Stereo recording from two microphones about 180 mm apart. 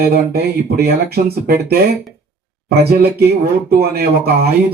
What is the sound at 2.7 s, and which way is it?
A man's voice, 60° right (ahead or behind).